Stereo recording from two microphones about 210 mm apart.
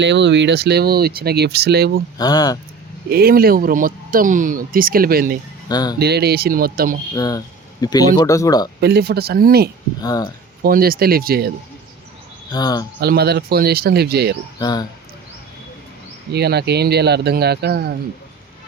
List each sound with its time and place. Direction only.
0.0 s speech: 55° right (ahead or behind)
2.1 s speech: 20° left (ahead or behind)
3.1 s speech: 45° right (ahead or behind)
5.6 s speech: 20° left (ahead or behind)
6.0 s speech: 50° right (ahead or behind)
7.2 s speech: 15° left (ahead or behind)
8.8 s speech: 50° right (ahead or behind)
10.0 s speech: 20° left (ahead or behind)
10.6 s speech: 45° right (ahead or behind)
12.5 s speech: 20° left (ahead or behind)
13.0 s speech: 50° right (ahead or behind)
14.6 s speech: 20° left (ahead or behind)
16.3 s speech: 50° right (ahead or behind)